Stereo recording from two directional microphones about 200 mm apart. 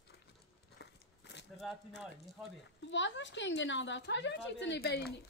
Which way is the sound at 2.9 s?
65° left (ahead or behind).